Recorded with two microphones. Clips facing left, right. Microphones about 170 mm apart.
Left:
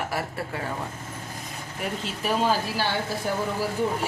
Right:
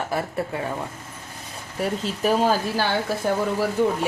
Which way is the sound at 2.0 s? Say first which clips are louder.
Right 4 dB; 40° right (ahead or behind).